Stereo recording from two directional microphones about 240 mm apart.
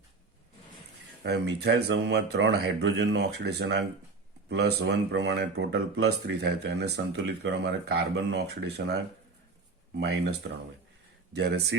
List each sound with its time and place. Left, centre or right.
1.2 s speech: right
10.0 s speech: right